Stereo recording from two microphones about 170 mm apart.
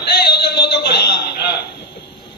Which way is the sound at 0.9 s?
75° left (ahead or behind).